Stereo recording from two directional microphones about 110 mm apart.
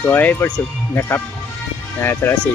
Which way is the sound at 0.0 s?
15° left (ahead or behind).